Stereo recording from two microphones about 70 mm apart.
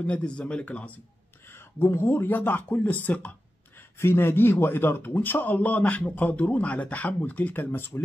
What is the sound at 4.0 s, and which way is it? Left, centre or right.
A man's voice, left.